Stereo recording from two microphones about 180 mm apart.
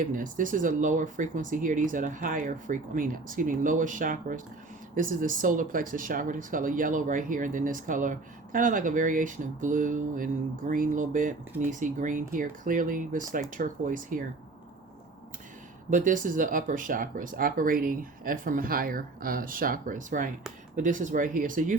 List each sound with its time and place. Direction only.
0.0 s speech: 45° right (ahead or behind)
15.9 s speech: 45° right (ahead or behind)